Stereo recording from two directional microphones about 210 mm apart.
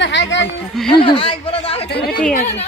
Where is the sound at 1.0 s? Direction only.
25° left (ahead or behind).